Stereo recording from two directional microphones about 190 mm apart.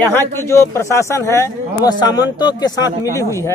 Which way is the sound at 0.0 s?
10° left (ahead or behind).